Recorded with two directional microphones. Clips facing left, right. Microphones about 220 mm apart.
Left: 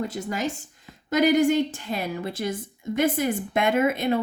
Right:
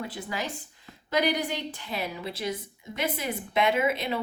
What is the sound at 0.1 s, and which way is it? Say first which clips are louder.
A woman's voice: left 6 dB; 45° left (ahead or behind).